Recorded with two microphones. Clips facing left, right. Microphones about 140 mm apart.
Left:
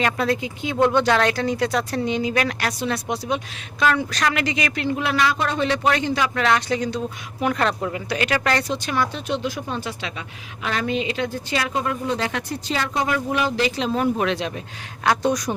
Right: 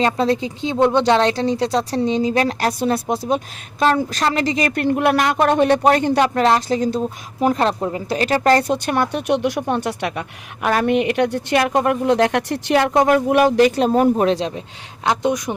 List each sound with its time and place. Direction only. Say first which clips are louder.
0.0 s speech: right 4 dB; 30° right (ahead or behind)
8.6 s speech: right 5 dB; 55° right (ahead or behind); by 11.6 s 70° right (ahead or behind)
11.6 s speech: right 7 dB; 55° right (ahead or behind); by 14.6 s 30° right (ahead or behind)
15.0 s speech: right 1 dB; 20° right (ahead or behind)